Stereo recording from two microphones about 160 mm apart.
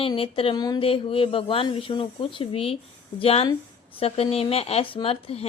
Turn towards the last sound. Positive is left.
turn(degrees=40)  # may be behind; listen again after turning